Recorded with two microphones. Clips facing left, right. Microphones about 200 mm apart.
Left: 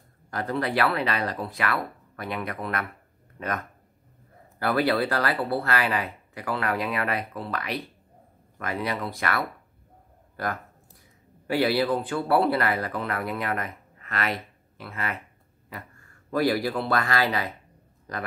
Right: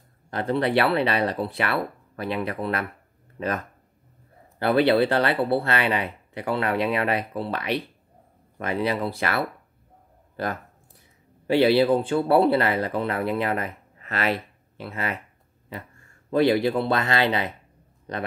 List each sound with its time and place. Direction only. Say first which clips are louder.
0.3 s speech: right 4 dB; 25° right (ahead or behind)
16.3 s speech: right 4 dB; 25° right (ahead or behind)